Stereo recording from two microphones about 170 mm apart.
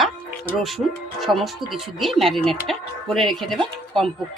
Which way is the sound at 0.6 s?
Centre (ahead or behind).